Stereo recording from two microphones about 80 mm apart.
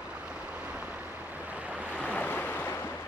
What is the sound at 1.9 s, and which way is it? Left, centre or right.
Waves, centre.